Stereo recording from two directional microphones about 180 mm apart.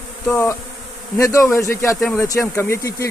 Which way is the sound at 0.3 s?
15° left (ahead or behind).